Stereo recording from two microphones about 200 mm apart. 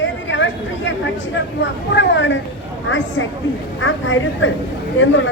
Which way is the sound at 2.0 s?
65° left (ahead or behind).